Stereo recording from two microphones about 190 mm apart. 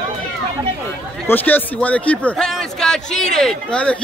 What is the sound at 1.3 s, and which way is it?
A man's voice, 10° left (ahead or behind).